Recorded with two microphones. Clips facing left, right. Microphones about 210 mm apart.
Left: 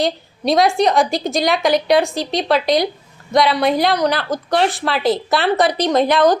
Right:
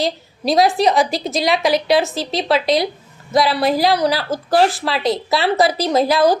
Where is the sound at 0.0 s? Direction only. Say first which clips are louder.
Left 1 dB; centre (ahead or behind).